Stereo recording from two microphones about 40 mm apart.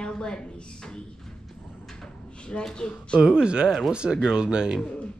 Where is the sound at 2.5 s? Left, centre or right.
Left.